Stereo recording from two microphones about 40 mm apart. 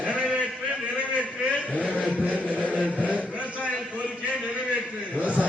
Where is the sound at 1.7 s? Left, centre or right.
Left.